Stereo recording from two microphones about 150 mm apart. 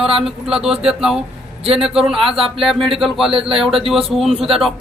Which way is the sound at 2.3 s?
40° right (ahead or behind).